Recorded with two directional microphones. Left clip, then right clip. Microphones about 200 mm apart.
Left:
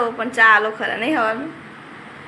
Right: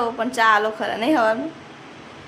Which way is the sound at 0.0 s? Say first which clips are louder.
Left 4 dB; 20° right (ahead or behind).